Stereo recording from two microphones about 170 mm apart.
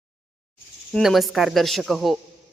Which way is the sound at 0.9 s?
Centre (ahead or behind).